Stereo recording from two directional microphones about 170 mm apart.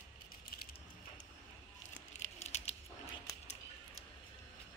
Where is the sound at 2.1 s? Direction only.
40° left (ahead or behind).